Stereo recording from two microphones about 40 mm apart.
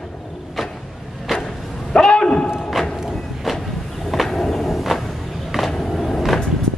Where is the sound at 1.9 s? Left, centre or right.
Centre.